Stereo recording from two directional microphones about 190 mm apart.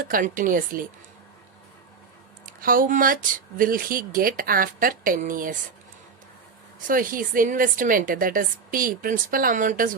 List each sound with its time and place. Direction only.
0.1 s a woman's voice: 45° right (ahead or behind)
2.5 s a woman's voice: 45° right (ahead or behind)
6.8 s a woman's voice: 45° right (ahead or behind)